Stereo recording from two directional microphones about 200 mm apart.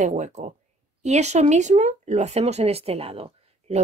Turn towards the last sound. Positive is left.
turn(degrees=-30)  # may be behind; listen again after turning